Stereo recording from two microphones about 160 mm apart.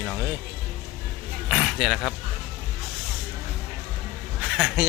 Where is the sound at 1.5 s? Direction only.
Centre (ahead or behind).